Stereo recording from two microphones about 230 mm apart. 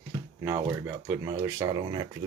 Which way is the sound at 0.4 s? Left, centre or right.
Centre.